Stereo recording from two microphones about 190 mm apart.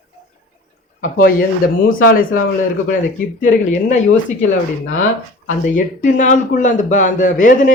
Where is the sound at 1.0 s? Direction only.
45° left (ahead or behind).